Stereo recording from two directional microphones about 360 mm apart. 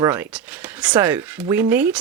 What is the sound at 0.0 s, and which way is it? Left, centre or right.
Speech, centre.